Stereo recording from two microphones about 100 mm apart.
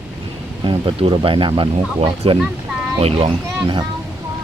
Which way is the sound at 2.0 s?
75° right (ahead or behind).